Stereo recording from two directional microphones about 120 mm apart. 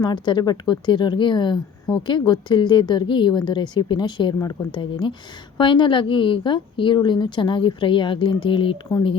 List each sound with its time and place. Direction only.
0.0 s speech: 40° left (ahead or behind)